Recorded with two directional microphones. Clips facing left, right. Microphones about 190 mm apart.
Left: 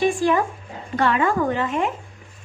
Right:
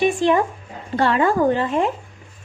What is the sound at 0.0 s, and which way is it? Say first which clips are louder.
Speech: right 2 dB; 20° right (ahead or behind).